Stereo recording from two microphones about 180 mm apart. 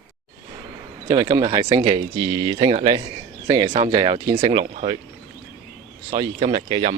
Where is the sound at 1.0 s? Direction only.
20° right (ahead or behind).